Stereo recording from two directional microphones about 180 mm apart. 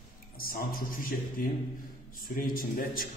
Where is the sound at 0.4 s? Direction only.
55° left (ahead or behind).